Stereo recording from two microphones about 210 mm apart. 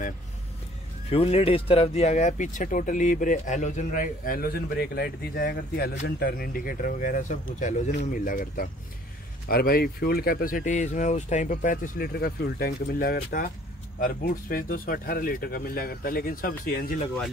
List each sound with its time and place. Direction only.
1.1 s speech: 30° left (ahead or behind); by 16.8 s 45° left (ahead or behind)